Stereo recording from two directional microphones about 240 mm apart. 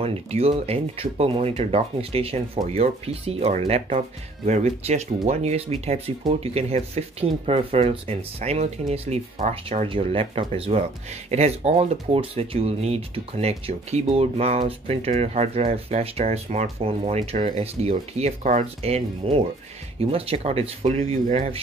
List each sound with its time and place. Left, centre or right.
0.0 s speech: right